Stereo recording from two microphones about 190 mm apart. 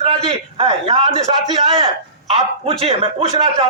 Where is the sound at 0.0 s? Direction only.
30° right (ahead or behind).